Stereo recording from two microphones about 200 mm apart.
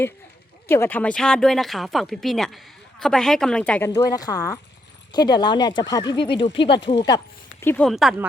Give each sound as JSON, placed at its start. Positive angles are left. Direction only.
{"t": 0.7, "sound": "speech", "side_deg": 10}
{"t": 7.6, "sound": "speech", "side_deg": 10}